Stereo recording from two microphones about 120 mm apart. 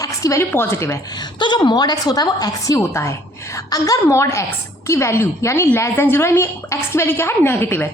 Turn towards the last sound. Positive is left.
turn(degrees=15)  # may be behind; listen again after turning